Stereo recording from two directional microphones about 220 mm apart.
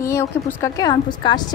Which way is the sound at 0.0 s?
10° left (ahead or behind).